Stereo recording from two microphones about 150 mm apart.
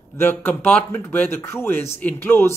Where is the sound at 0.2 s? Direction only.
15° left (ahead or behind).